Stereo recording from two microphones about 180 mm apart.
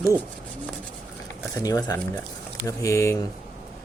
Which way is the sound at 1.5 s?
20° left (ahead or behind).